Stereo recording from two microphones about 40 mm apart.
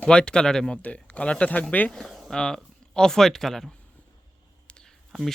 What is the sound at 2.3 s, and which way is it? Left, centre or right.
Speech, centre.